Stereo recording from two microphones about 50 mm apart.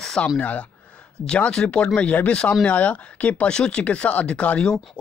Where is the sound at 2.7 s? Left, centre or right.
Left.